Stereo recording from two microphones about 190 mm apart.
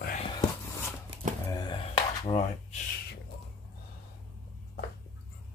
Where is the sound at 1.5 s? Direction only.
25° left (ahead or behind).